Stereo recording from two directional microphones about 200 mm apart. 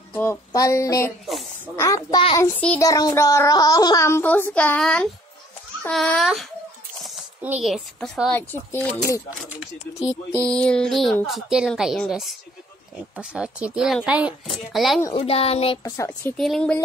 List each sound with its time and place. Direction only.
0.1 s speech: 15° left (ahead or behind)
1.2 s speech: centre (ahead or behind)
1.8 s a woman's voice: 20° left (ahead or behind); by 6.4 s centre (ahead or behind)
7.4 s a woman's voice: 5° right (ahead or behind)
9.6 s a woman's voice: 5° right (ahead or behind)
15.1 s speech: 30° left (ahead or behind)
16.1 s a woman's voice: 5° left (ahead or behind)